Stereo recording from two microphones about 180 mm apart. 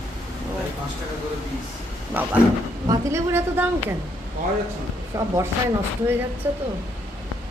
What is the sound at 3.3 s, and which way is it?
Speech, 10° right (ahead or behind).